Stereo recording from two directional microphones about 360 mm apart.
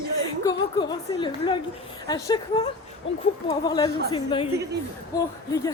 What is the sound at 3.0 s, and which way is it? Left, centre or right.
Speech, left.